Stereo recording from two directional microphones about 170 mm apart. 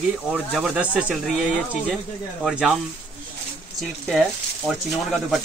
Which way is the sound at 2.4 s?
5° right (ahead or behind).